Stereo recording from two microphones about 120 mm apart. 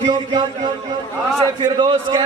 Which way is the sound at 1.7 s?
40° right (ahead or behind).